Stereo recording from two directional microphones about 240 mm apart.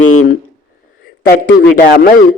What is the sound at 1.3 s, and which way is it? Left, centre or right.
Speech, left.